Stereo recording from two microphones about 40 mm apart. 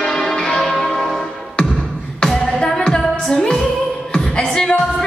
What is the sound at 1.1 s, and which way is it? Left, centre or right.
Music, centre.